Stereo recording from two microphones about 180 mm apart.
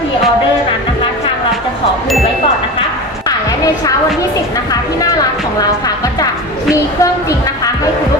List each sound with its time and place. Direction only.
7.0 s train: 20° left (ahead or behind)